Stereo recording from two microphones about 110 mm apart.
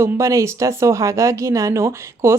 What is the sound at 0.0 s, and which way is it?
Speech, 30° right (ahead or behind).